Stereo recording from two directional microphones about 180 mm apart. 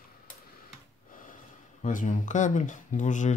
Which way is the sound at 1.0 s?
50° left (ahead or behind).